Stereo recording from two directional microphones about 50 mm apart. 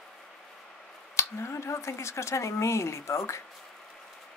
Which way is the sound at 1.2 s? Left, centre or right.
Left.